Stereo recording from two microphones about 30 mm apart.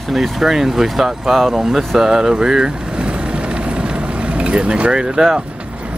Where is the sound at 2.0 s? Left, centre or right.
Right.